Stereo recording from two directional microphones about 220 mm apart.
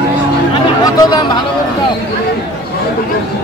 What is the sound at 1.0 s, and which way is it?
Speech, 20° left (ahead or behind).